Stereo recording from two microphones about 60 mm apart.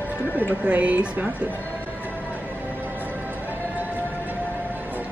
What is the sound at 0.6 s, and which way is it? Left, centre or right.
Speech, right.